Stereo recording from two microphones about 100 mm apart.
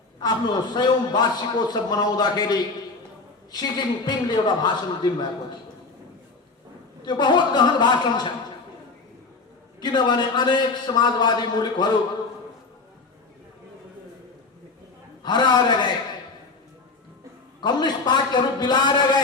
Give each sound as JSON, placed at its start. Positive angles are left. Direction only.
{"t": 0.2, "sound": "a man's voice", "side_deg": 45}
{"t": 7.0, "sound": "a man's voice", "side_deg": 45}
{"t": 9.8, "sound": "a man's voice", "side_deg": 45}
{"t": 15.2, "sound": "a man's voice", "side_deg": 45}
{"t": 17.6, "sound": "a man's voice", "side_deg": 45}